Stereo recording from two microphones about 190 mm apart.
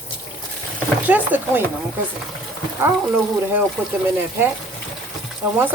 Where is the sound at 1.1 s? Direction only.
10° right (ahead or behind).